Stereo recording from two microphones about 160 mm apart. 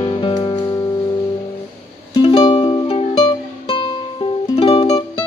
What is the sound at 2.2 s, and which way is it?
Music, 30° left (ahead or behind).